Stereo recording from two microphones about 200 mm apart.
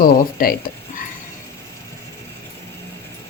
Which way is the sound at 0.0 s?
45° left (ahead or behind).